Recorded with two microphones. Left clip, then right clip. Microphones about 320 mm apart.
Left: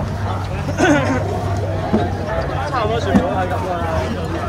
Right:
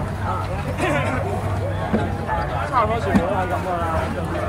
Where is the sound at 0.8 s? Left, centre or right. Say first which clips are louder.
Left 7 dB; left.